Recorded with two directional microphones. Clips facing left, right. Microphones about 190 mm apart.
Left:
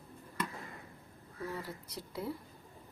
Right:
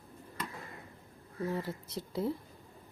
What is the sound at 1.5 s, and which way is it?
Speech, 25° right (ahead or behind).